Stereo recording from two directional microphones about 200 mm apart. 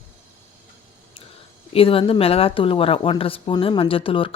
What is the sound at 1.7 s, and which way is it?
Speech, 30° left (ahead or behind).